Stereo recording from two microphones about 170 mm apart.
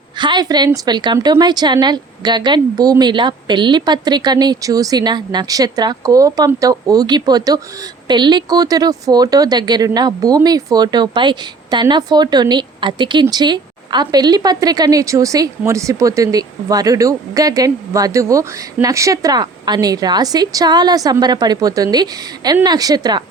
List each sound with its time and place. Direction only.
0.2 s a woman's voice: 25° right (ahead or behind)